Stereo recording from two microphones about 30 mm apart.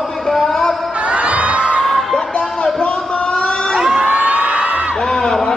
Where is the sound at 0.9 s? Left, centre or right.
Right.